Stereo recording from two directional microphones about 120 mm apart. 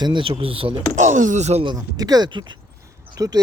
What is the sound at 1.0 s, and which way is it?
Speech, 90° right.